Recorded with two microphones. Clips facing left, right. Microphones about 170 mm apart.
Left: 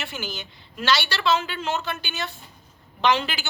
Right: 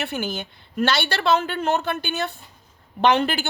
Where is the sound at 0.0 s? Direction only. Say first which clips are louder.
Right 6 dB; 55° right (ahead or behind).